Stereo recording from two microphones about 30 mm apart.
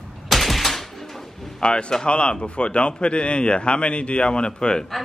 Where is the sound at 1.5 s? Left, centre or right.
Left.